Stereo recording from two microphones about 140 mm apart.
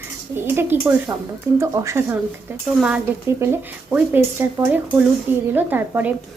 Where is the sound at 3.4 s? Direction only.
15° right (ahead or behind).